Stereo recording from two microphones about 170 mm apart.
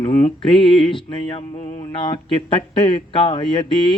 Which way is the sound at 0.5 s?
30° left (ahead or behind).